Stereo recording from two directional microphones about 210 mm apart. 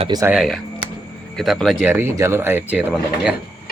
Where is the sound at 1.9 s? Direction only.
10° right (ahead or behind).